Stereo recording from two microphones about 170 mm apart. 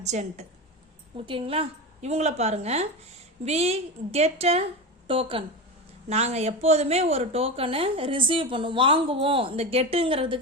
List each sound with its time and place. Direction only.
0.0 s a woman's voice: 40° right (ahead or behind)
1.1 s speech: 30° right (ahead or behind)